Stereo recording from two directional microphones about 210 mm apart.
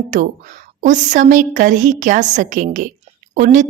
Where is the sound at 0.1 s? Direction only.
40° right (ahead or behind).